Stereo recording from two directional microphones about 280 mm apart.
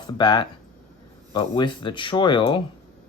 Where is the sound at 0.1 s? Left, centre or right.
Centre.